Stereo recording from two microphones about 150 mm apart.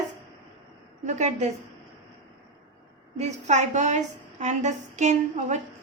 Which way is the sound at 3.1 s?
50° right (ahead or behind).